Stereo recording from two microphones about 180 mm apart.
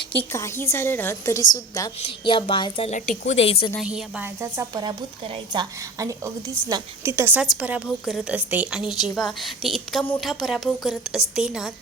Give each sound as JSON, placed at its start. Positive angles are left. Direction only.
{"t": 0.1, "sound": "a woman's voice", "side_deg": 10}
{"t": 2.0, "sound": "a woman's voice", "side_deg": 30}
{"t": 3.8, "sound": "a woman's voice", "side_deg": -5}